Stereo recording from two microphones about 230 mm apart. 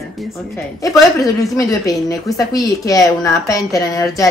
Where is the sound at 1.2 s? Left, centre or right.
Centre.